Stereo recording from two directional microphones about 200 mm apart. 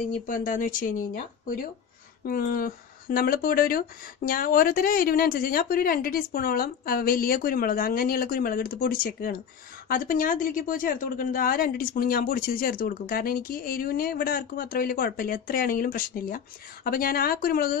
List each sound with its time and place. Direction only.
0.3 s speech: 40° left (ahead or behind)